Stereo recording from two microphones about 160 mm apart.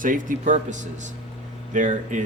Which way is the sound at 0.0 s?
55° right (ahead or behind).